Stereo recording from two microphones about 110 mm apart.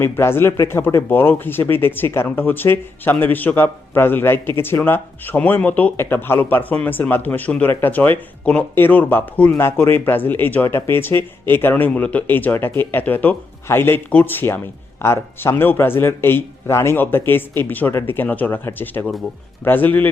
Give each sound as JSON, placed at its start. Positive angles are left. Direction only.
{"t": 0.0, "sound": "speech", "side_deg": 20}